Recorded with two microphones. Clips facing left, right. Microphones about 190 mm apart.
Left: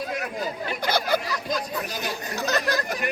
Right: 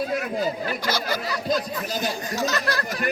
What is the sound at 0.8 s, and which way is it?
Speech, 60° left (ahead or behind).